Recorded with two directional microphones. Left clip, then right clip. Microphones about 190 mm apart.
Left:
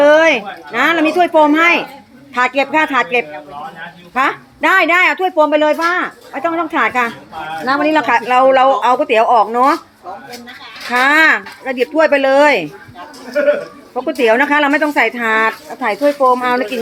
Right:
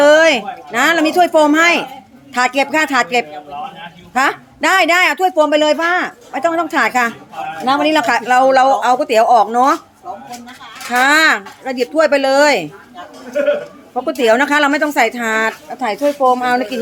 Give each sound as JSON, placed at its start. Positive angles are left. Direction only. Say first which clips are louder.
{"t": 0.0, "sound": "a woman's voice", "louder": "even", "side_deg": -15}
{"t": 10.9, "sound": "speech", "louder": "left 1 dB", "side_deg": -5}
{"t": 13.9, "sound": "speech", "louder": "even", "side_deg": -10}